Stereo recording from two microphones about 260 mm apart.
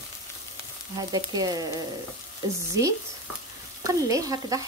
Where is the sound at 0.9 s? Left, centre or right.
Centre.